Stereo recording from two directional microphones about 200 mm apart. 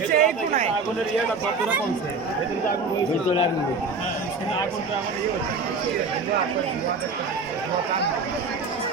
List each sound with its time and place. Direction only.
0.1 s speech: 35° right (ahead or behind)